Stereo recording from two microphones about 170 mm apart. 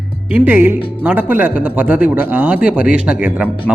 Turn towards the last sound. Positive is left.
turn(degrees=-5)  # may be behind; listen again after turning